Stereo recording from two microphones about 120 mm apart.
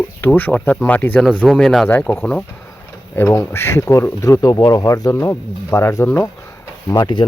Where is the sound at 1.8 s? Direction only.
15° left (ahead or behind).